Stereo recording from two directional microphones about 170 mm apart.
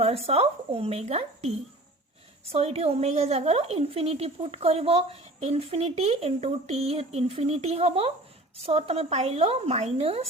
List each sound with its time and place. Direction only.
0.0 s a woman's voice: 35° right (ahead or behind)